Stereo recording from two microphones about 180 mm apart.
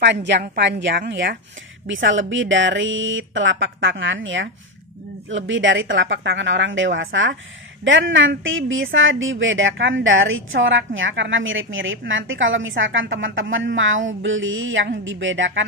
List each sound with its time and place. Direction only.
0.0 s a woman's voice: 75° right (ahead or behind); by 1.4 s 60° right (ahead or behind)
1.9 s speech: 90° right